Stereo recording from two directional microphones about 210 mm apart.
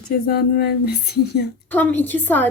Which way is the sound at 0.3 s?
50° left (ahead or behind).